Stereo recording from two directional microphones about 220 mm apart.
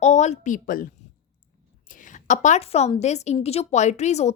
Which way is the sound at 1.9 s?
35° left (ahead or behind).